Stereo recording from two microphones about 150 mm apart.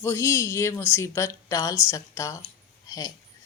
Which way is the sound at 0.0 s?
20° left (ahead or behind).